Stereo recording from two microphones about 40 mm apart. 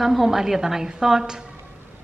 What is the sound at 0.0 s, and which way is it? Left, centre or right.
Speech, centre.